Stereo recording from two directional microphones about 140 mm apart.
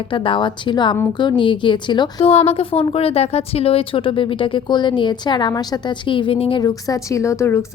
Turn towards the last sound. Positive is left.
turn(degrees=20)  # may be behind; listen again after turning